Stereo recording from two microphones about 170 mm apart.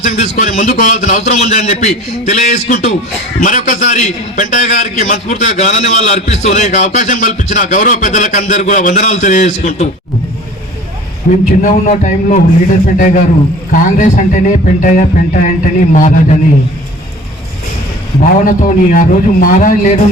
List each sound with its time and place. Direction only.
0.0 s a man's voice: 45° left (ahead or behind)
11.3 s a man's voice: 50° left (ahead or behind)
13.7 s a man's voice: 50° left (ahead or behind)
18.2 s a man's voice: 50° left (ahead or behind)